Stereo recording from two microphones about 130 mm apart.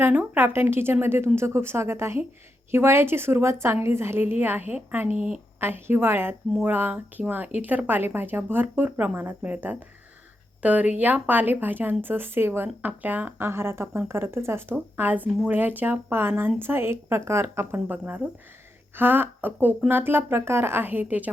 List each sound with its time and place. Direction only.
0.0 s speech: 15° right (ahead or behind)